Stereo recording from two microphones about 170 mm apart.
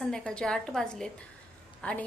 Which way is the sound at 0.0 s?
5° left (ahead or behind).